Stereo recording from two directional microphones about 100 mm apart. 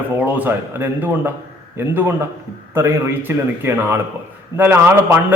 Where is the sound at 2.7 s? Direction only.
25° right (ahead or behind).